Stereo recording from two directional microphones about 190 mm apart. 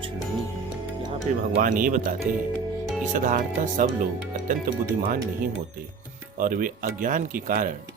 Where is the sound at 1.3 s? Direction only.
40° right (ahead or behind).